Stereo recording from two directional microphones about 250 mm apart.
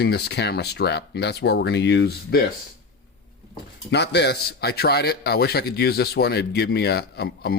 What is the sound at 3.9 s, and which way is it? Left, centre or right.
A man's voice, left.